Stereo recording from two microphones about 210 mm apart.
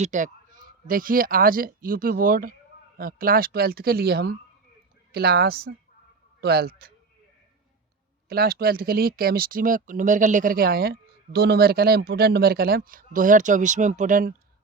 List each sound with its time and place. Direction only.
0.0 s speech: 35° right (ahead or behind)
8.3 s speech: 45° right (ahead or behind)